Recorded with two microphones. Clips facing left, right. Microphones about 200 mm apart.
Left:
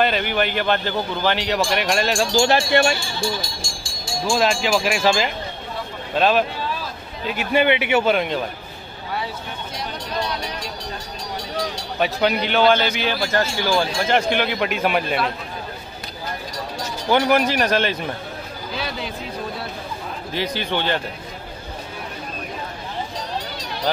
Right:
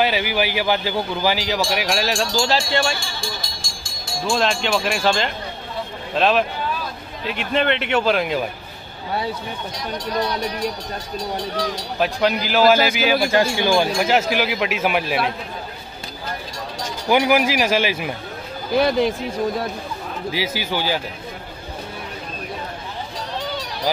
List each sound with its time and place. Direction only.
0.0 s speech: 5° right (ahead or behind)
2.4 s speech: 60° left (ahead or behind)
4.2 s speech: centre (ahead or behind)
12.0 s speech: centre (ahead or behind)
17.1 s speech: 5° right (ahead or behind)
18.8 s speech: 50° right (ahead or behind)
20.2 s speech: 5° right (ahead or behind)